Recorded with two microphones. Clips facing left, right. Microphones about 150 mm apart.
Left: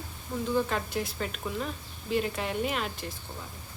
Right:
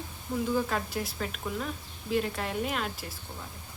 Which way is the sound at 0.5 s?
Centre (ahead or behind).